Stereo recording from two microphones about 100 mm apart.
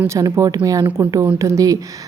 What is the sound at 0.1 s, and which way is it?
A woman's voice, 35° right (ahead or behind).